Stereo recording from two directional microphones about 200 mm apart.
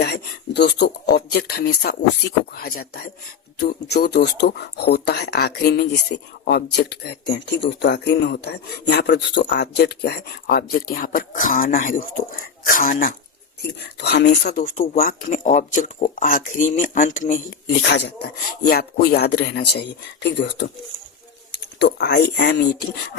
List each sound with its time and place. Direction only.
0.0 s a sound: 55° left (ahead or behind)
1.1 s speech: 50° left (ahead or behind)
13.6 s speech: 55° left (ahead or behind)
14.9 s speech: 45° left (ahead or behind)
17.8 s speech: 60° left (ahead or behind)